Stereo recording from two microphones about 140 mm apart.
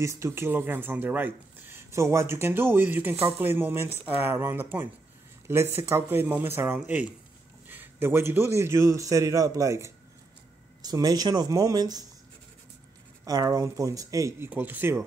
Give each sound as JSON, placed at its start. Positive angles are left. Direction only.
{"t": 0.0, "sound": "a man's voice", "side_deg": -20}
{"t": 13.2, "sound": "a man's voice", "side_deg": -25}